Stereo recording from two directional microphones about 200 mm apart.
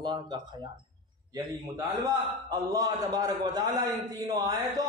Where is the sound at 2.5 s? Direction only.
20° right (ahead or behind).